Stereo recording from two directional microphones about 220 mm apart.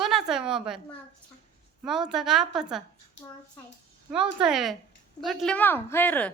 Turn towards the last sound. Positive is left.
turn(degrees=5)  # may be behind; listen again after turning